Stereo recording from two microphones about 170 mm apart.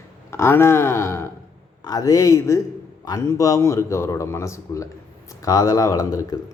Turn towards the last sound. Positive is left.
turn(degrees=20)  # may be behind; listen again after turning